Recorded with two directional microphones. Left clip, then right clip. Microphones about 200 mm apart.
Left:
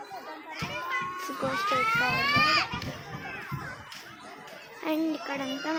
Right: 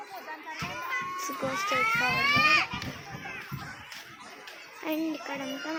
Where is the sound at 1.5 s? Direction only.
30° right (ahead or behind).